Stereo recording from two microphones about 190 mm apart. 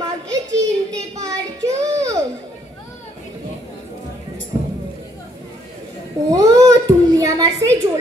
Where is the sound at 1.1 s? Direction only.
20° right (ahead or behind).